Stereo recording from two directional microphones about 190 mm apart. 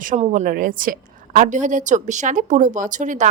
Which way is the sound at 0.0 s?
40° right (ahead or behind).